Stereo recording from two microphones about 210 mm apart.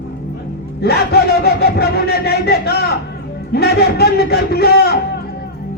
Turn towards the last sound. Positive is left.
turn(degrees=50)  # may be behind; listen again after turning